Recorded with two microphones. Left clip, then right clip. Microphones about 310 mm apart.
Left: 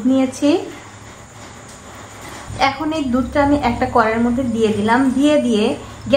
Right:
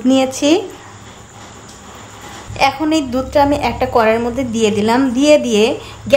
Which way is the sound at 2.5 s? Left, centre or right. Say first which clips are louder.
Right 4 dB; right.